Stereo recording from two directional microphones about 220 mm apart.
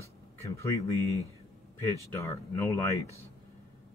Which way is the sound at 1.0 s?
15° right (ahead or behind).